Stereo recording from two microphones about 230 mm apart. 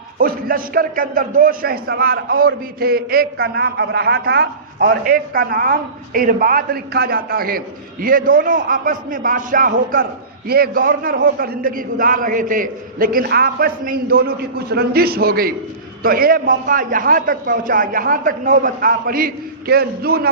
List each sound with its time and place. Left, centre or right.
0.2 s a man's voice: right